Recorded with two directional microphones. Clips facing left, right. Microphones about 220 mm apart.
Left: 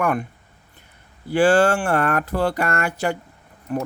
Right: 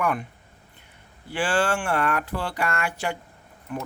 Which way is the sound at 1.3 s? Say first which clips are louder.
Left 8 dB; 40° left (ahead or behind).